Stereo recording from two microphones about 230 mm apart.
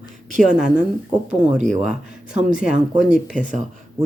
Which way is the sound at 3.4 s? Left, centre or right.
Right.